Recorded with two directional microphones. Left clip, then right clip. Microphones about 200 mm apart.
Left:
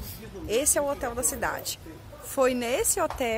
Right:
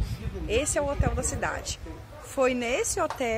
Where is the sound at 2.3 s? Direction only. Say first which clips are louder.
Left 1 dB; 5° left (ahead or behind).